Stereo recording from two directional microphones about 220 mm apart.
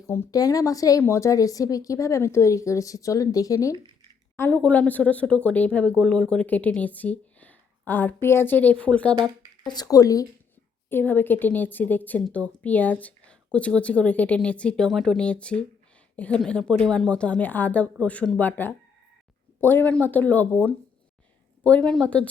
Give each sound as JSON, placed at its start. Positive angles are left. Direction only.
{"t": 0.1, "sound": "a woman's voice", "side_deg": 15}
{"t": 9.6, "sound": "a woman's voice", "side_deg": 15}